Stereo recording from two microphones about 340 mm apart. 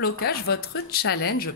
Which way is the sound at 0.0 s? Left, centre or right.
Left.